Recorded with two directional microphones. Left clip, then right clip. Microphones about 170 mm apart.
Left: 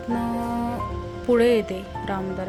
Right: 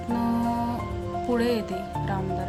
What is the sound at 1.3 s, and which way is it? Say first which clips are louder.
Speech: left 8 dB; 10° left (ahead or behind).